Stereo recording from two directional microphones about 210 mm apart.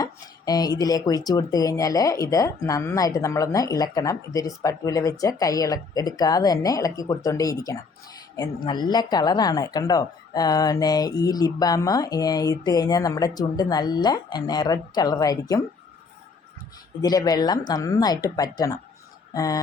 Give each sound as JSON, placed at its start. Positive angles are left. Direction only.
{"t": 0.0, "sound": "speech", "side_deg": 15}
{"t": 17.0, "sound": "speech", "side_deg": 15}